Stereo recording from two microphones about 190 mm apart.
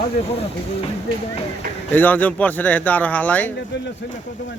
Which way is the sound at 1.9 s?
10° left (ahead or behind).